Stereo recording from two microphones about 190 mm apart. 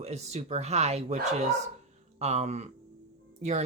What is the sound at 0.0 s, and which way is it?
Speech, 35° right (ahead or behind).